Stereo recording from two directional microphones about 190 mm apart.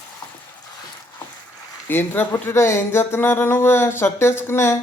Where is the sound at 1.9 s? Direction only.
10° left (ahead or behind).